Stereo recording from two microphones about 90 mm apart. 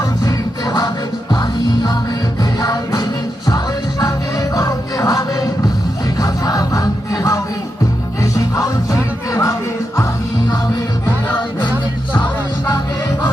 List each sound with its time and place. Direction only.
0.3 s music: 45° left (ahead or behind)
4.5 s music: 40° left (ahead or behind)